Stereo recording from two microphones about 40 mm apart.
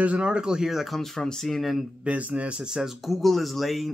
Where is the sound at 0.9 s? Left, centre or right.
Centre.